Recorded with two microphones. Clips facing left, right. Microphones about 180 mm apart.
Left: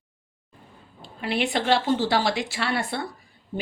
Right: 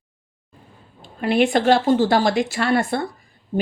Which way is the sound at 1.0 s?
50° right (ahead or behind).